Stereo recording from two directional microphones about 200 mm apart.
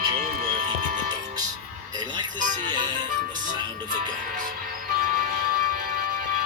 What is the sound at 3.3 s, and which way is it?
Music, 40° right (ahead or behind).